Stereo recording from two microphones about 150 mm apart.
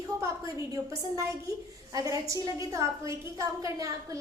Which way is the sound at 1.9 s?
25° right (ahead or behind).